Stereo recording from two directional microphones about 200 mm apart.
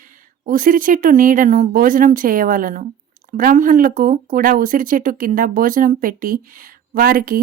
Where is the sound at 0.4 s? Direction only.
45° right (ahead or behind).